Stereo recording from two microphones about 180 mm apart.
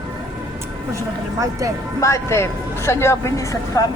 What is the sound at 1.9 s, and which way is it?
Speech, 15° left (ahead or behind).